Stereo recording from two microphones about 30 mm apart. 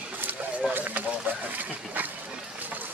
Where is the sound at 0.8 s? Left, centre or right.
Right.